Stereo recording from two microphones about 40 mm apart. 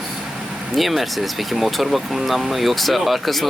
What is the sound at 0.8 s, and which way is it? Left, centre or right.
Speech, centre.